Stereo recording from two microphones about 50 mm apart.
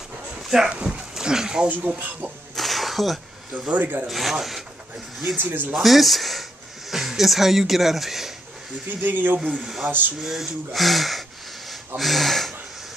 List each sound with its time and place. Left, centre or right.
0.4 s dog: centre
0.7 s speech: right
2.0 s speech: right
2.5 s a sound: centre
3.6 s speech: right
4.1 s speech: centre
5.4 s speech: right
5.8 s speech: centre
8.8 s speech: right
9.6 s speech: centre
9.8 s speech: right
10.2 s speech: centre
12.0 s gasp: centre